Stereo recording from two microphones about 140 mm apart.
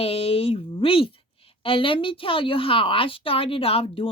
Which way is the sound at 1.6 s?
40° left (ahead or behind).